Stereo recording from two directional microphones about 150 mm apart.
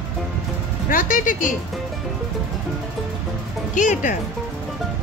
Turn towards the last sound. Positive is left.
turn(degrees=55)  # may be behind; listen again after turning